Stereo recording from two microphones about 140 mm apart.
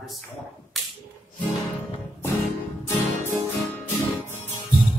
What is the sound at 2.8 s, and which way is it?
Music, 15° left (ahead or behind).